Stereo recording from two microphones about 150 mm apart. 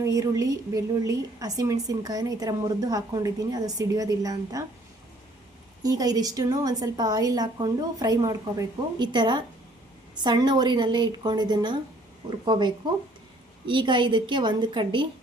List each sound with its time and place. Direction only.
0.0 s a woman's voice: 20° right (ahead or behind)
5.8 s a woman's voice: 25° right (ahead or behind)